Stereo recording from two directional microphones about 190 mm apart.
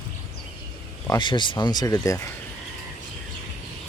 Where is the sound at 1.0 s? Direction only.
20° left (ahead or behind).